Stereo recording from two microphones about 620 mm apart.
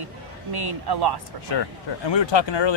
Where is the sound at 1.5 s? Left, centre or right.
Left.